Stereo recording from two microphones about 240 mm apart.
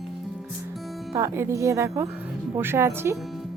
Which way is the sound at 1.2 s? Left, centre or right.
Centre.